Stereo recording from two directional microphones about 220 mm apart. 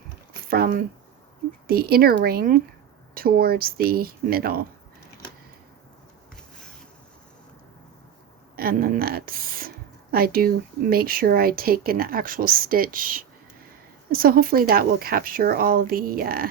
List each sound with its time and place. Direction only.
0.4 s speech: 40° right (ahead or behind)
8.5 s a woman's voice: 40° right (ahead or behind)